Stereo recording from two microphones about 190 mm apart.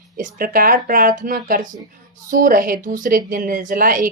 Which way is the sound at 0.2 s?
50° right (ahead or behind).